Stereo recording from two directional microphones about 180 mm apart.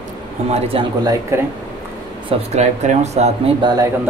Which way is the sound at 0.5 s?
30° right (ahead or behind).